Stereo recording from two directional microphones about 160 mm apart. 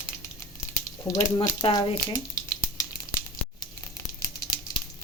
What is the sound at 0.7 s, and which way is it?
Sizzle, 20° left (ahead or behind).